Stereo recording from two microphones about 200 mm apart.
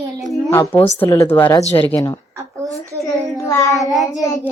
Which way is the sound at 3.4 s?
15° left (ahead or behind).